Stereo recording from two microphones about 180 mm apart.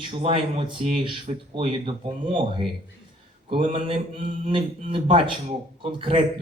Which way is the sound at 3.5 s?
30° right (ahead or behind).